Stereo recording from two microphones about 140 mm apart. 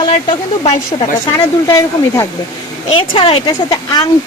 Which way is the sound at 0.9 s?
30° left (ahead or behind).